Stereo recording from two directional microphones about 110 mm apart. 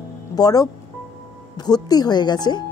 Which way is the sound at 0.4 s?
35° left (ahead or behind).